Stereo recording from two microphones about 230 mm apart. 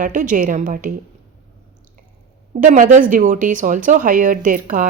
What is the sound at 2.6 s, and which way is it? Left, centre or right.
Speech, right.